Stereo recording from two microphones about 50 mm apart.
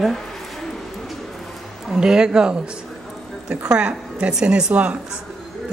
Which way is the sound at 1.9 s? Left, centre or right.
Centre.